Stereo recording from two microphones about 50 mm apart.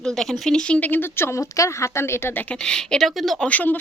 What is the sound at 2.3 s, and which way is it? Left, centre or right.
Speech, left.